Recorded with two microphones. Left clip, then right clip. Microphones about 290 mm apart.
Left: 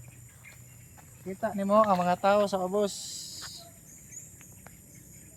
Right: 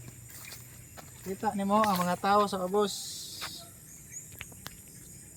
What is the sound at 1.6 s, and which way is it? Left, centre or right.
Speech, centre.